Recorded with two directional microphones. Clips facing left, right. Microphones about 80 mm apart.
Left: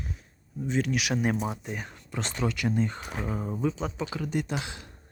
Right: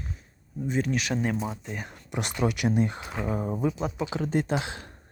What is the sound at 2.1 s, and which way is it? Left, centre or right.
Speech, centre.